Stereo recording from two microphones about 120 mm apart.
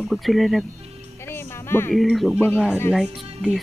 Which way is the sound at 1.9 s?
Centre (ahead or behind).